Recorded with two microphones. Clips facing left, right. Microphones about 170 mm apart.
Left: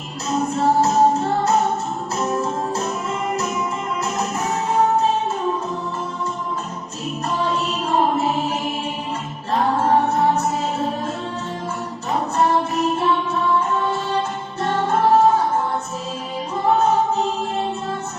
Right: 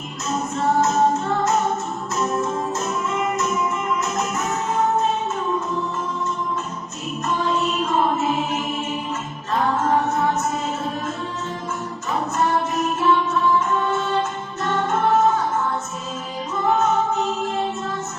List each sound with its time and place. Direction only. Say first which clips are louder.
0.5 s music: left 2 dB; 30° left (ahead or behind)
7.9 s music: left 4 dB; 30° left (ahead or behind)
12.4 s music: left 3 dB; 30° left (ahead or behind)
16.6 s music: left 2 dB; 30° left (ahead or behind)